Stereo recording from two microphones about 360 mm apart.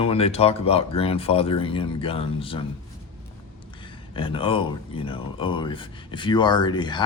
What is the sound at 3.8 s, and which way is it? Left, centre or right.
Speech, centre.